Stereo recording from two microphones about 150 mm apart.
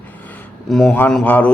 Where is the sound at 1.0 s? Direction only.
10° left (ahead or behind).